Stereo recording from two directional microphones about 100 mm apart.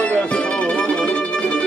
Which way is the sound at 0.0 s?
10° left (ahead or behind).